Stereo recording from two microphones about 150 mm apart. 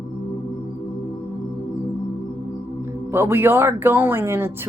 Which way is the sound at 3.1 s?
15° right (ahead or behind).